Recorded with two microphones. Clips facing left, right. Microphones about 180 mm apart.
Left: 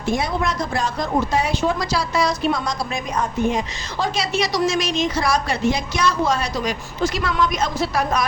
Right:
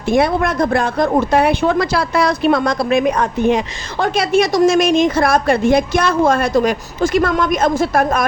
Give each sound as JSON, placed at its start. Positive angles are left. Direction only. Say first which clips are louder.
{"t": 0.1, "sound": "speech", "louder": "right 7 dB", "side_deg": -60}